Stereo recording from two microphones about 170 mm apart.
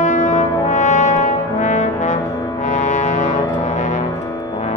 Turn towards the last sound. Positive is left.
turn(degrees=45)  # may be behind; listen again after turning